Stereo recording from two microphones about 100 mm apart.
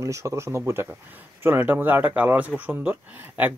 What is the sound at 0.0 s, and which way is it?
Speech, 30° right (ahead or behind).